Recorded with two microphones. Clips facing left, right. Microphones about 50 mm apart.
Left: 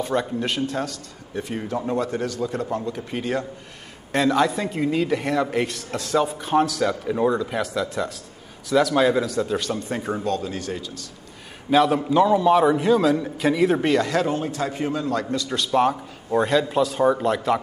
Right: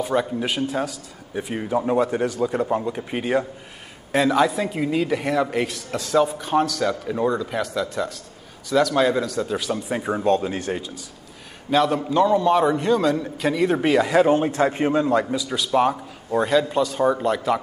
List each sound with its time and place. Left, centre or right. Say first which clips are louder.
0.0 s a man's voice: right 1 dB; centre
4.1 s speech: right 1 dB; centre
10.2 s a man's voice: right 5 dB; right
11.7 s speech: left 2 dB; centre
14.2 s a man's voice: right 6 dB; right
15.3 s speech: even; centre